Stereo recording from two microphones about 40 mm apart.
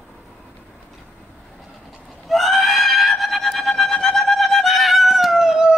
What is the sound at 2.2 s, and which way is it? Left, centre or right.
Goat, centre.